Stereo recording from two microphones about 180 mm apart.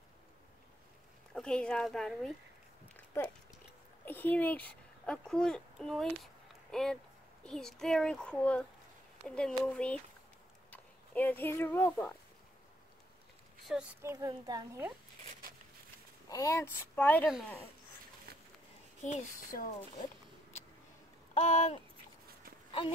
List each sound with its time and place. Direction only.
1.3 s a child's voice: 5° left (ahead or behind)
4.0 s a child's voice: 10° left (ahead or behind)
13.7 s a child's voice: 5° right (ahead or behind)
14.0 s speech: 20° right (ahead or behind)
16.3 s speech: 20° left (ahead or behind)
18.3 s a sound: 60° right (ahead or behind)
19.0 s speech: 45° left (ahead or behind)
21.4 s a sound: 35° left (ahead or behind)
22.7 s speech: 30° left (ahead or behind)